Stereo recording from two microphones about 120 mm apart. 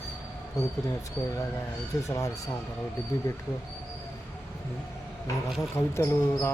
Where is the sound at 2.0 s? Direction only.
25° left (ahead or behind).